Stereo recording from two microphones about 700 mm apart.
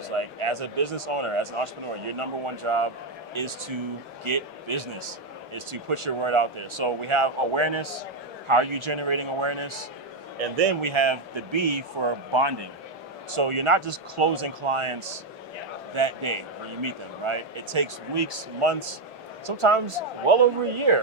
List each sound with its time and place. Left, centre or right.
0.2 s a man's voice: right